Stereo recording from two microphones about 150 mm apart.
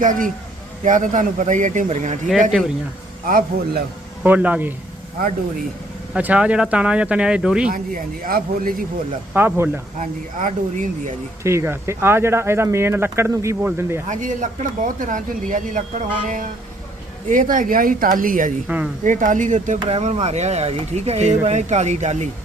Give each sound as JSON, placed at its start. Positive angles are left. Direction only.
{"t": 0.0, "sound": "a man's voice", "side_deg": -60}
{"t": 2.5, "sound": "speech", "side_deg": -5}
{"t": 3.2, "sound": "speech", "side_deg": -70}
{"t": 4.2, "sound": "speech", "side_deg": -10}
{"t": 6.1, "sound": "speech", "side_deg": -10}
{"t": 7.7, "sound": "speech", "side_deg": -65}
{"t": 9.3, "sound": "speech", "side_deg": -15}
{"t": 10.0, "sound": "a man's voice", "side_deg": -55}
{"t": 11.4, "sound": "speech", "side_deg": -15}
{"t": 14.1, "sound": "a man's voice", "side_deg": -60}